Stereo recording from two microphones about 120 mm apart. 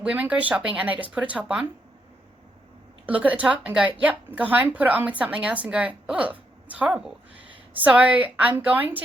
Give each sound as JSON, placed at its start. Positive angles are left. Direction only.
{"t": 0.0, "sound": "a woman's voice", "side_deg": -10}
{"t": 3.1, "sound": "a woman's voice", "side_deg": -10}